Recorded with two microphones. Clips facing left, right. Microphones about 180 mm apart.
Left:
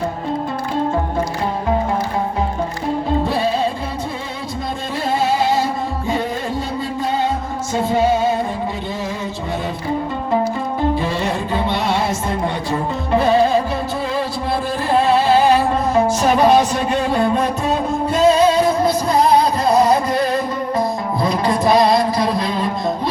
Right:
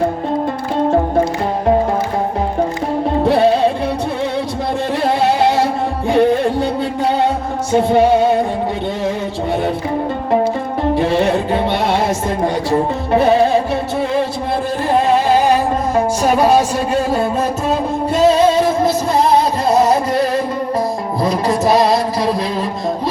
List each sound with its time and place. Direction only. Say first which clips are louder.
3.2 s music: right 7 dB; 70° right (ahead or behind)
5.0 s music: right 3 dB; 70° right (ahead or behind)
7.7 s music: right 5 dB; 65° right (ahead or behind)
10.9 s music: right 6 dB; 65° right (ahead or behind)
15.1 s a sound: left 1 dB; 15° right (ahead or behind)
21.2 s music: right 2 dB; 5° right (ahead or behind)